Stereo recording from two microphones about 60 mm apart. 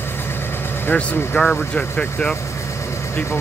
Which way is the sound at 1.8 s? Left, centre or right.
Centre.